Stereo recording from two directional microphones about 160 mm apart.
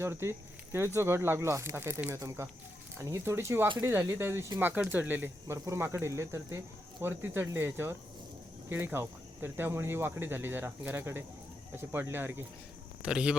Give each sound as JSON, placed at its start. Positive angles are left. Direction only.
{"t": 0.0, "sound": "a man's voice", "side_deg": -15}